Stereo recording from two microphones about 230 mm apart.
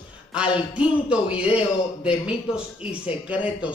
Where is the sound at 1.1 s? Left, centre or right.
Centre.